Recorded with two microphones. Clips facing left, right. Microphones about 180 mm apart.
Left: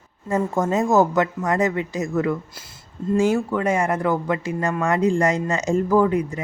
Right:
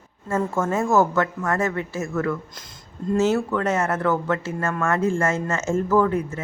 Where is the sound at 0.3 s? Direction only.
15° left (ahead or behind).